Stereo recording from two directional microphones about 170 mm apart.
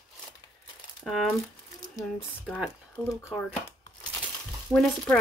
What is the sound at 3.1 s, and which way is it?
Speech, 15° left (ahead or behind).